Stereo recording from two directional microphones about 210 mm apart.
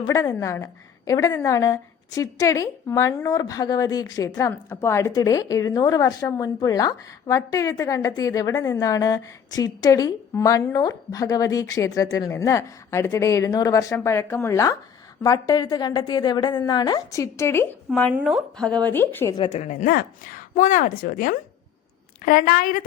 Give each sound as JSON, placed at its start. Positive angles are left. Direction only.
{"t": 0.0, "sound": "a woman's voice", "side_deg": 15}
{"t": 18.1, "sound": "speech", "side_deg": -5}
{"t": 19.4, "sound": "speech", "side_deg": 30}